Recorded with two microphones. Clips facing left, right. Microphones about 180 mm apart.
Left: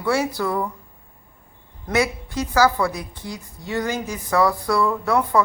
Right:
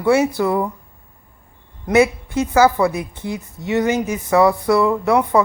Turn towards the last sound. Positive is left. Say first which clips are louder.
# right 4 dB
turn(degrees=-20)  # may be behind; listen again after turning